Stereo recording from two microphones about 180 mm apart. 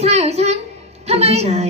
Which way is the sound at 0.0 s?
35° right (ahead or behind).